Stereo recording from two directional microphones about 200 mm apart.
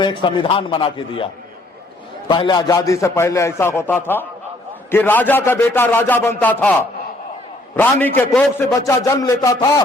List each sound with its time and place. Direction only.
0.0 s a man's voice: 25° left (ahead or behind); by 6.7 s 5° left (ahead or behind)
7.8 s a man's voice: 10° left (ahead or behind)